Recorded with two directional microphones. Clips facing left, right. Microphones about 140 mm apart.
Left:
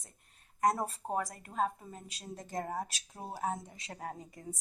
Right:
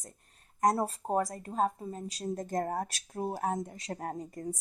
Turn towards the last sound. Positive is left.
turn(degrees=-45)  # may be behind; listen again after turning